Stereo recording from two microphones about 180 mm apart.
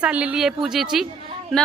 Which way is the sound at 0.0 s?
5° right (ahead or behind).